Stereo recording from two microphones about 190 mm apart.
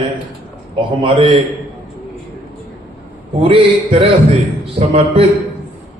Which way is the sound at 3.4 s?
30° right (ahead or behind).